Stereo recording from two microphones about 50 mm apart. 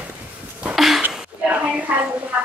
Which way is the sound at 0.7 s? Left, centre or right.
Centre.